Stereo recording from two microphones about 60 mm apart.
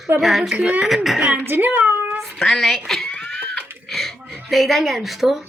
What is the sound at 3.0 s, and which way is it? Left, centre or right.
Laughter, centre.